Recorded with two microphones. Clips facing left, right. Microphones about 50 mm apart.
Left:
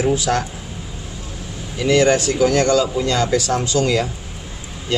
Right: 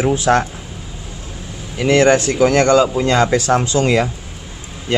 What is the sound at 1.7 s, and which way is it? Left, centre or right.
Speech, right.